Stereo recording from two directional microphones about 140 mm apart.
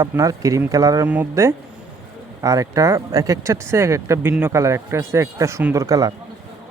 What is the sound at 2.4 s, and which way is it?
Speech, 25° right (ahead or behind).